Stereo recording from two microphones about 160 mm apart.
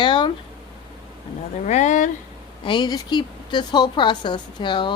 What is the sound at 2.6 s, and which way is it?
A woman's voice, 30° left (ahead or behind).